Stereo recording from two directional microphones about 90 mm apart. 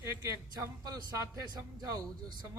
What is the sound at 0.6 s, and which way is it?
Speech, 45° right (ahead or behind).